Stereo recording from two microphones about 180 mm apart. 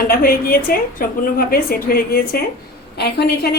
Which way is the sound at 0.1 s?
55° left (ahead or behind).